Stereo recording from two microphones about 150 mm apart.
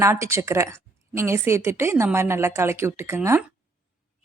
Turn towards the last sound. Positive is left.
turn(degrees=-15)  # may be behind; listen again after turning